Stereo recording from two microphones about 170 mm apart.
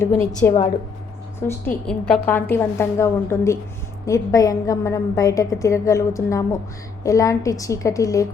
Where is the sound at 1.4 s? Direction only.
15° left (ahead or behind).